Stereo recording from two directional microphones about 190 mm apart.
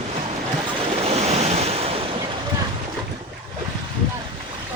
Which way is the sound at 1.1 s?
35° right (ahead or behind).